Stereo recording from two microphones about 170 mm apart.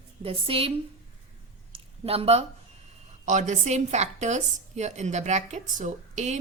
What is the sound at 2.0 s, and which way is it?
A woman's voice, 35° right (ahead or behind).